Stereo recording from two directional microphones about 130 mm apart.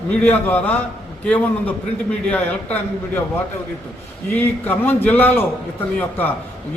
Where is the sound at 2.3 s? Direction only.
10° left (ahead or behind).